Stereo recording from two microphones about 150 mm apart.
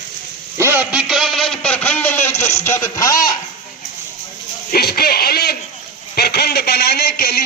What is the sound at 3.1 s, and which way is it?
Speech, 65° left (ahead or behind).